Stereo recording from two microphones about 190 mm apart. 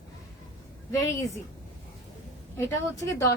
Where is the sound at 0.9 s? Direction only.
15° left (ahead or behind).